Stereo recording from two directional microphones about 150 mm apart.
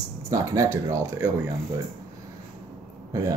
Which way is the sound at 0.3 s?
20° right (ahead or behind).